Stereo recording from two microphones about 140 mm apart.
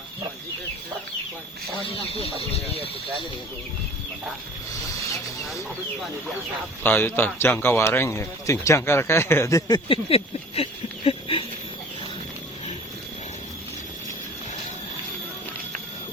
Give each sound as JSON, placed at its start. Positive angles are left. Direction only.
{"t": 1.8, "sound": "speech", "side_deg": 40}
{"t": 6.8, "sound": "speech", "side_deg": 15}
{"t": 10.1, "sound": "speech", "side_deg": 45}